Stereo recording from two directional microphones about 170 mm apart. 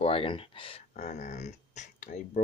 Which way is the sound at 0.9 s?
45° left (ahead or behind).